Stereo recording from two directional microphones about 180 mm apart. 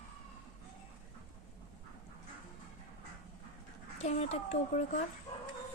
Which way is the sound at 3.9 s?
40° left (ahead or behind).